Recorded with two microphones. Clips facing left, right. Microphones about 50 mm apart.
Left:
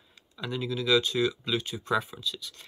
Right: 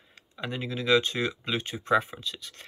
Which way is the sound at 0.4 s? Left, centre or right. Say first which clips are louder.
Left 1 dB; right.